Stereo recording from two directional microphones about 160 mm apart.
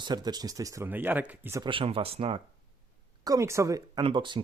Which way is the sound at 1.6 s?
35° right (ahead or behind).